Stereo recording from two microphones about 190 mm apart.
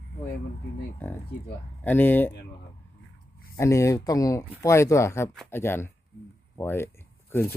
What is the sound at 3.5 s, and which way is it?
Speech, 15° left (ahead or behind).